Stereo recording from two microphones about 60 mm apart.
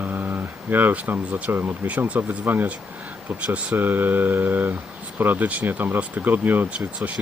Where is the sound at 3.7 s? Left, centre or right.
Right.